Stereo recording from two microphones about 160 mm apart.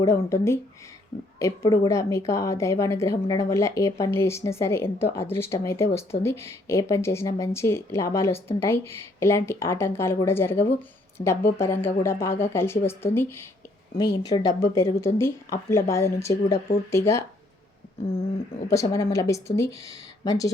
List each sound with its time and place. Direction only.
0.0 s a woman's voice: 20° left (ahead or behind)
11.2 s speech: 30° left (ahead or behind)
11.5 s a woman's voice: 15° left (ahead or behind)
18.7 s a woman's voice: 20° left (ahead or behind)